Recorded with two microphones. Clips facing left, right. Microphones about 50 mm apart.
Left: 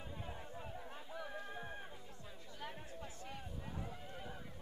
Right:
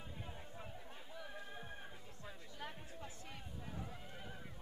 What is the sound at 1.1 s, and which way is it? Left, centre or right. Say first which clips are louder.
Music: left 4 dB; centre.